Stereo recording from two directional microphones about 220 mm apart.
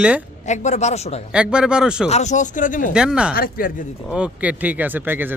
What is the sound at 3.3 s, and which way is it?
Speech, 40° left (ahead or behind).